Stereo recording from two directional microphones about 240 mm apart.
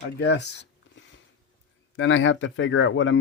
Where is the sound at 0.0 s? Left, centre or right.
Left.